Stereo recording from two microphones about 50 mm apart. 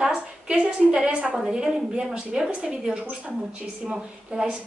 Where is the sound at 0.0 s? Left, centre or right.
Centre.